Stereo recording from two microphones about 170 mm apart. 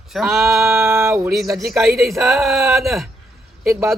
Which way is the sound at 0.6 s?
15° right (ahead or behind).